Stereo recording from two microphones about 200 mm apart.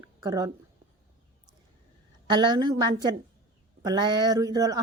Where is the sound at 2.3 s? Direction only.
20° right (ahead or behind).